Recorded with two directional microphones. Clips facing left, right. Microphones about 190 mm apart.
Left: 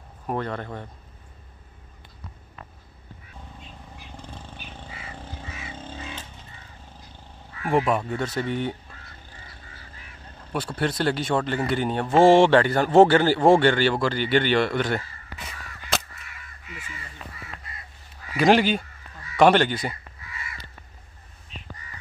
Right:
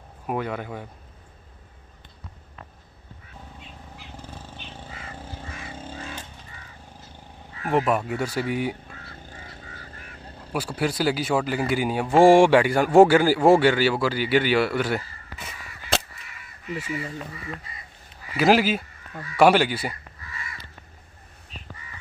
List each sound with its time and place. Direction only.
0.3 s a man's voice: 5° right (ahead or behind)
4.2 s a sound: 5° right (ahead or behind)
4.8 s vehicle: 10° left (ahead or behind)
5.2 s a sound: 10° right (ahead or behind)
5.5 s a sound: 5° left (ahead or behind)
7.7 s a man's voice: 5° right (ahead or behind)
9.0 s vehicle: 50° right (ahead or behind)
10.5 s a man's voice: 5° right (ahead or behind)
18.3 s a man's voice: 5° right (ahead or behind)